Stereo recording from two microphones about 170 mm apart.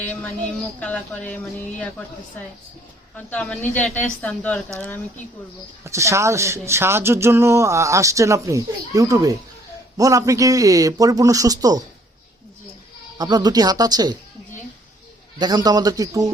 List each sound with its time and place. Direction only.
0.0 s a woman's voice: 10° left (ahead or behind)
3.2 s a woman's voice: 10° left (ahead or behind)
5.8 s a man's voice: 15° right (ahead or behind)
13.1 s a man's voice: 25° right (ahead or behind)
15.4 s a man's voice: 25° right (ahead or behind)